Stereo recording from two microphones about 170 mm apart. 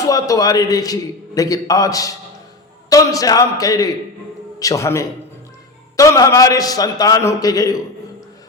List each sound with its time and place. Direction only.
0.0 s a man's voice: 20° left (ahead or behind)